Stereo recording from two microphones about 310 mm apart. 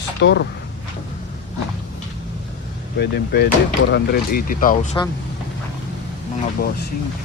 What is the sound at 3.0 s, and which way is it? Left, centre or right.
Speech, left.